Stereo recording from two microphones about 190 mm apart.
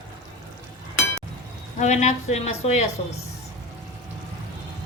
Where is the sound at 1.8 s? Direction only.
35° left (ahead or behind).